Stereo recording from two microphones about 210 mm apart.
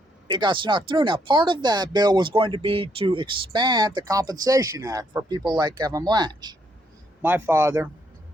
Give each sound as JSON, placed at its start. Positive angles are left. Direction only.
{"t": 0.3, "sound": "speech", "side_deg": -20}
{"t": 7.2, "sound": "a man's voice", "side_deg": -10}